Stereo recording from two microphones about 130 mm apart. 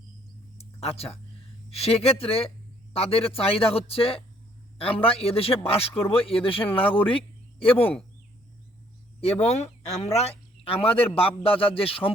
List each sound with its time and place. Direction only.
0.6 s a sound: 50° left (ahead or behind)
1.7 s a man's voice: 50° left (ahead or behind)
9.4 s a man's voice: 55° left (ahead or behind)